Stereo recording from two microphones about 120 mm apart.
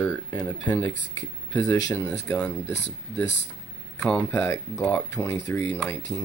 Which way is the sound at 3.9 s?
10° left (ahead or behind).